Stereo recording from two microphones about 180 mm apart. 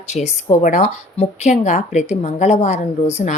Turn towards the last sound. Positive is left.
turn(degrees=40)  # may be behind; listen again after turning